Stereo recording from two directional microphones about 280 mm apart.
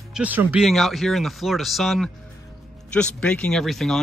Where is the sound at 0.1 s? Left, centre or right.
Centre.